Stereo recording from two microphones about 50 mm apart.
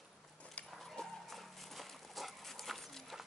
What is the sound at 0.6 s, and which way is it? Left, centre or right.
Dog, centre.